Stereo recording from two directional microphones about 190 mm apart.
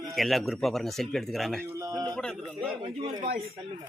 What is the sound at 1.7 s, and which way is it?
Speech, 15° right (ahead or behind).